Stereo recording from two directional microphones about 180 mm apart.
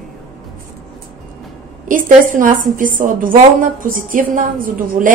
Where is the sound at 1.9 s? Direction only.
50° right (ahead or behind).